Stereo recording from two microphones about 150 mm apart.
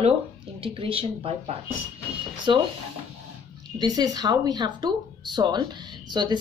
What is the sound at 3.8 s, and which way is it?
A woman's voice, 25° right (ahead or behind).